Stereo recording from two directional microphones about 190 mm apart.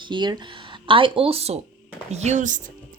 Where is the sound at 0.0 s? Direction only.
25° right (ahead or behind).